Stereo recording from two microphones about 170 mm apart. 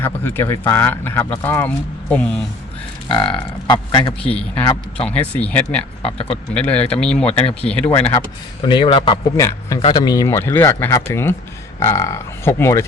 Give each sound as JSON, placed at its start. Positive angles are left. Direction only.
{"t": 0.0, "sound": "speech", "side_deg": 15}
{"t": 3.1, "sound": "speech", "side_deg": 30}
{"t": 5.0, "sound": "speech", "side_deg": 10}
{"t": 6.0, "sound": "speech", "side_deg": 35}
{"t": 6.5, "sound": "speech", "side_deg": 5}
{"t": 8.6, "sound": "a man's voice", "side_deg": 30}
{"t": 9.4, "sound": "speech", "side_deg": 20}